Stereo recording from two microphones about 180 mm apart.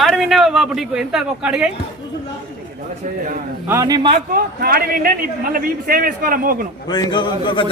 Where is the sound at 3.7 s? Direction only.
20° right (ahead or behind).